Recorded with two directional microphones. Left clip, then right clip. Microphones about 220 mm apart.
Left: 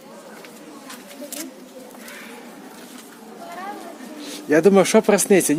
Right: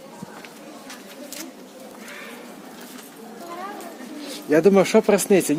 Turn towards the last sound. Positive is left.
turn(degrees=20)  # may be behind; listen again after turning